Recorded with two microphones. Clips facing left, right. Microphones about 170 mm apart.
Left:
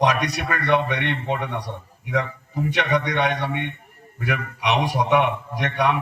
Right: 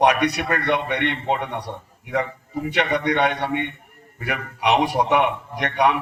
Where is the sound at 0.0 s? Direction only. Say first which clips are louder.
Right 3 dB; 60° right (ahead or behind).